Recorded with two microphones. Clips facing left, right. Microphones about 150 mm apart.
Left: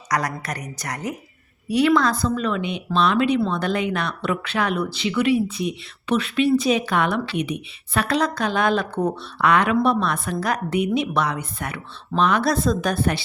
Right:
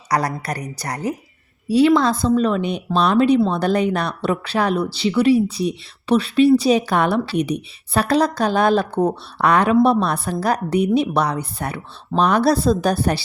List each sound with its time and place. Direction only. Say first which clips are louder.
0.1 s speech: right 4 dB; 35° right (ahead or behind)